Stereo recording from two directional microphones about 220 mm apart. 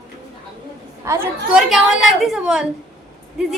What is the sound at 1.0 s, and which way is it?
A woman's voice, 10° right (ahead or behind).